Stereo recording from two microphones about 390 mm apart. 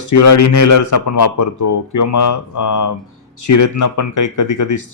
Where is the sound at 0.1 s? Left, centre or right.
Left.